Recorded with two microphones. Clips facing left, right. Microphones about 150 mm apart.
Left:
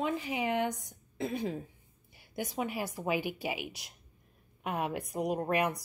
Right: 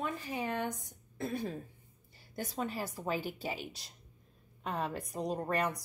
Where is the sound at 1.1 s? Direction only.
15° left (ahead or behind).